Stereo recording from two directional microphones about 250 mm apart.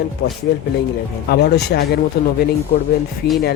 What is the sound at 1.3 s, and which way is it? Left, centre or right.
Speech, left.